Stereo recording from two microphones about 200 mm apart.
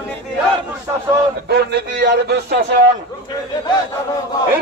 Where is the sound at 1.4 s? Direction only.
55° right (ahead or behind).